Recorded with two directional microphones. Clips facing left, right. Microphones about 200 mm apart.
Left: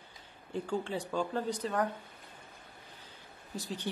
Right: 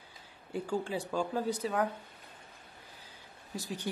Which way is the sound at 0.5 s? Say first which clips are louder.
Right 1 dB; 10° right (ahead or behind).